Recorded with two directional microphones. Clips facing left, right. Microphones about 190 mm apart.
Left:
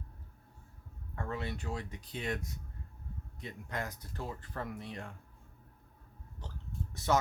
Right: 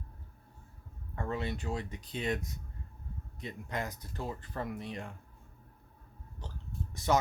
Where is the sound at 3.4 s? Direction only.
20° right (ahead or behind).